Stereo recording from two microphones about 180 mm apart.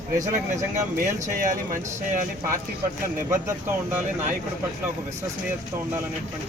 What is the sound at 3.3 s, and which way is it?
Speech, 15° right (ahead or behind).